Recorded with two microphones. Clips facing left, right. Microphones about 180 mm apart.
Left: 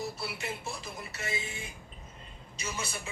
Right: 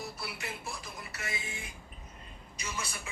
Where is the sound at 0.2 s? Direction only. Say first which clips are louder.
Left 3 dB; 25° left (ahead or behind).